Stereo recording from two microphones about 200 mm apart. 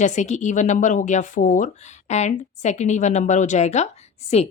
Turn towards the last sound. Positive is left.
turn(degrees=35)  # may be behind; listen again after turning